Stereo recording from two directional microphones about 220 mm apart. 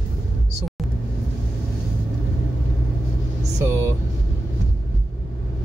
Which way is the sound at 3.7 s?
10° right (ahead or behind).